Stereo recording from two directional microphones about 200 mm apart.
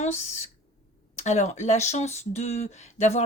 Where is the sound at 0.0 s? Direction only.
35° left (ahead or behind).